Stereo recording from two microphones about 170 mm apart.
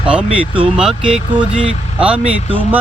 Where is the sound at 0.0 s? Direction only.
5° right (ahead or behind).